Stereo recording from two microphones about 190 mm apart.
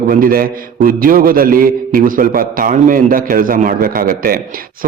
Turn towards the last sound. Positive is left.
turn(degrees=-50)  # may be behind; listen again after turning